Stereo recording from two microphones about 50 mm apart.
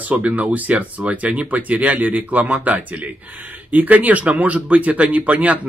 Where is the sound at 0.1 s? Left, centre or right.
Right.